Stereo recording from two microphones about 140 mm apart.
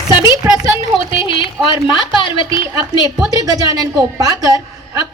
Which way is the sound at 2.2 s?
35° left (ahead or behind).